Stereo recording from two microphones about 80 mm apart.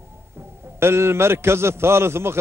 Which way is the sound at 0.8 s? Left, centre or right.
Right.